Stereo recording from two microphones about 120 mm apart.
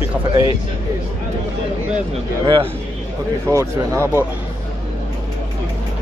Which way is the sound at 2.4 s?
45° right (ahead or behind).